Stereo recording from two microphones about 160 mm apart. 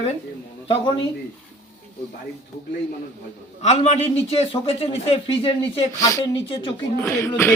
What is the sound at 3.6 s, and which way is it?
Speech, 45° left (ahead or behind).